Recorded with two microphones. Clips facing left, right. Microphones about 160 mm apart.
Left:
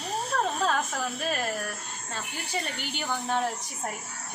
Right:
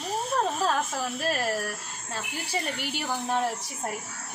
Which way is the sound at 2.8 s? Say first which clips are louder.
Right 1 dB; 5° right (ahead or behind).